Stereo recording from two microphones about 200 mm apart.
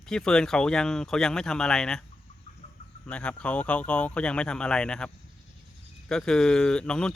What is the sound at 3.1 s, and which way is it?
Speech, 5° left (ahead or behind).